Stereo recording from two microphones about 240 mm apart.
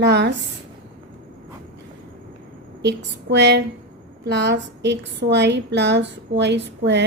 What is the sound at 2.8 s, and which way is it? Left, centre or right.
A woman's voice, right.